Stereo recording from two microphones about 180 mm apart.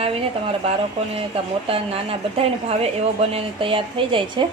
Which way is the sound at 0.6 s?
35° right (ahead or behind).